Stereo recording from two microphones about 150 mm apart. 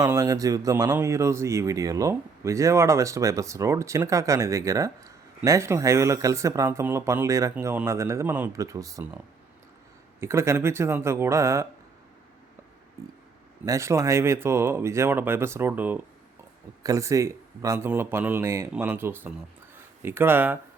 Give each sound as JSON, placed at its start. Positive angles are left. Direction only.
{"t": 0.0, "sound": "speech", "side_deg": -25}
{"t": 10.2, "sound": "speech", "side_deg": -15}
{"t": 13.7, "sound": "speech", "side_deg": -20}